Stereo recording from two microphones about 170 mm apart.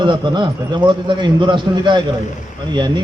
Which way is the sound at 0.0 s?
25° right (ahead or behind).